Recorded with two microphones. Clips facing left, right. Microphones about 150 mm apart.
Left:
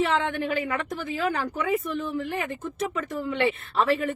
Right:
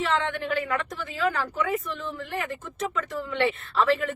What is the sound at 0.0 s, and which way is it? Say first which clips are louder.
Speech: left 2 dB; 15° left (ahead or behind).